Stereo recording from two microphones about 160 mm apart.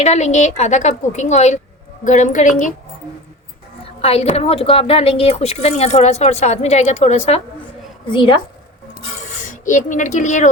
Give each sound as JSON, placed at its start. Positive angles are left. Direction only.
{"t": 0.0, "sound": "a woman's voice", "side_deg": 45}
{"t": 4.0, "sound": "a woman's voice", "side_deg": 40}
{"t": 8.1, "sound": "a woman's voice", "side_deg": 30}
{"t": 9.4, "sound": "a woman's voice", "side_deg": 50}